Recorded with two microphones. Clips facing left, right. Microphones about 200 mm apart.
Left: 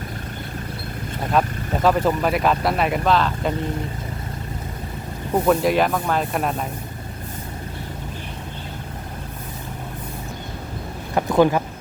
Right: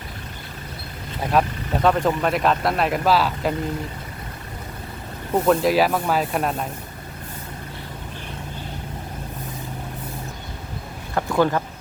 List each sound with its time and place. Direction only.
1.3 s speech: centre (ahead or behind)
5.3 s speech: centre (ahead or behind)
11.1 s speech: 15° left (ahead or behind)